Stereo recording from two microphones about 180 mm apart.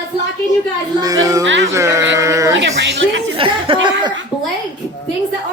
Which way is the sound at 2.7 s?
85° right.